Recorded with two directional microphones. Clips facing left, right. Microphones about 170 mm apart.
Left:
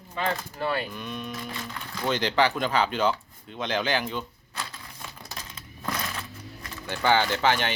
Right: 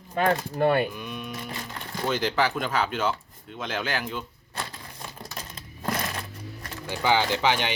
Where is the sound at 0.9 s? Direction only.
10° right (ahead or behind).